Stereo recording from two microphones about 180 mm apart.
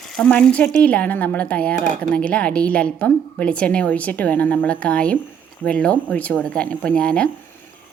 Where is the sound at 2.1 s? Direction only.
5° left (ahead or behind).